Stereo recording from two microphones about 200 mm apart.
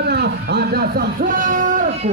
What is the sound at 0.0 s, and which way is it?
A man's voice, 55° right (ahead or behind).